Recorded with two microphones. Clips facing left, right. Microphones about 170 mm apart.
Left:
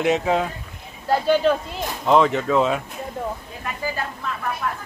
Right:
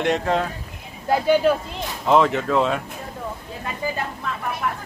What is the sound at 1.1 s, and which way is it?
Speech, 10° right (ahead or behind).